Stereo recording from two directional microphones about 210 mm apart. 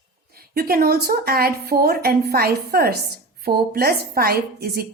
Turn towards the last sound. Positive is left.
turn(degrees=-45)  # may be behind; listen again after turning